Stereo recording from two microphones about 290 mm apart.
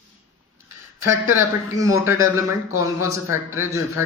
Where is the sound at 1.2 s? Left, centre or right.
Centre.